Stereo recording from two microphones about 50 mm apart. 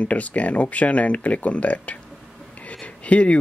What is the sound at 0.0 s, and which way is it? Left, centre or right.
Speech, left.